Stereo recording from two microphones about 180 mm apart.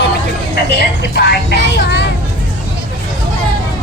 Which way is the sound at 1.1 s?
65° left (ahead or behind).